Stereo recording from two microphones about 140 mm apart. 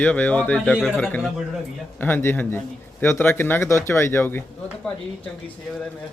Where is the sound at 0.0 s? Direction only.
10° left (ahead or behind).